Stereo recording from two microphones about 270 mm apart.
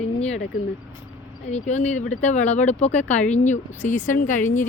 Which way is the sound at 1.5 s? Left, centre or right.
Left.